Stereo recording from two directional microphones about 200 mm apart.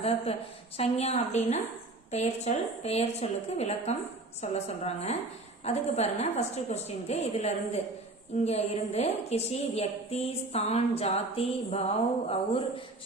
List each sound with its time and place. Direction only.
0.8 s a woman's voice: 30° left (ahead or behind)